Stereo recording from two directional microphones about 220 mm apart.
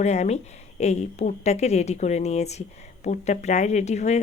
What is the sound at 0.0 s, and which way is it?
A woman's voice, 30° left (ahead or behind).